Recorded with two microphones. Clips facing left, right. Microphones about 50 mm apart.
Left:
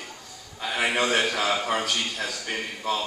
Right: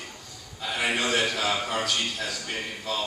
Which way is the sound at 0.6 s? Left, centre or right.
Left.